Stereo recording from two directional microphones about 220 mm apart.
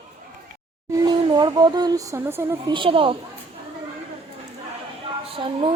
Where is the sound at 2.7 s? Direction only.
25° right (ahead or behind).